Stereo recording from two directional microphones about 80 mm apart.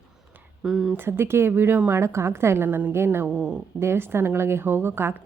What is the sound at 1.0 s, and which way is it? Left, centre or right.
A woman's voice, right.